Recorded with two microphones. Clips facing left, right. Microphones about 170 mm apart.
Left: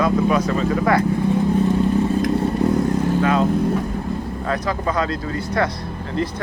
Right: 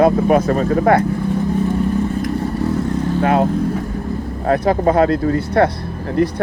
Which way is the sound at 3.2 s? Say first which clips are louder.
Right 5 dB; 55° right (ahead or behind).